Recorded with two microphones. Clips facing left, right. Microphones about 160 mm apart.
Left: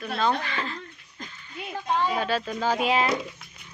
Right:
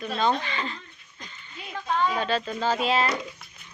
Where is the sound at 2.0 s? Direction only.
5° left (ahead or behind).